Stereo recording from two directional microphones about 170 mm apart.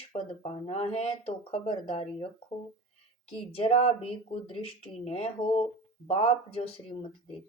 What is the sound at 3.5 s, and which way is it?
Speech, 40° left (ahead or behind).